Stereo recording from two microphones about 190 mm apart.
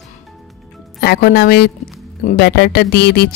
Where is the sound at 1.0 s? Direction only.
55° left (ahead or behind).